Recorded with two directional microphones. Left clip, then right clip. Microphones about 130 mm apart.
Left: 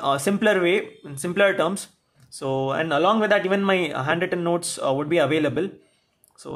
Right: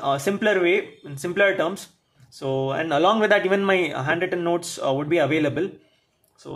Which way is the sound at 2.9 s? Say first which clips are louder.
Right 2 dB; 10° left (ahead or behind).